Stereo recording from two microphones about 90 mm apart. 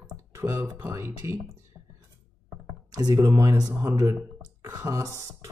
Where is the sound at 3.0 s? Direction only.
45° right (ahead or behind).